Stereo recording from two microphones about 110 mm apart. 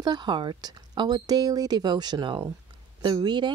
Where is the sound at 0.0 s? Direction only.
40° right (ahead or behind).